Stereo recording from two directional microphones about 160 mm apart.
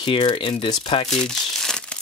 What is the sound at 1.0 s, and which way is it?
Speech, 5° left (ahead or behind).